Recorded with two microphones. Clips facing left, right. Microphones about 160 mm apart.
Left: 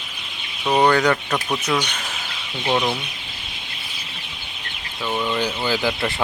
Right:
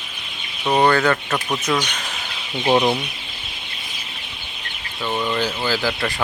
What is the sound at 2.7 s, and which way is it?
Speech, 20° right (ahead or behind).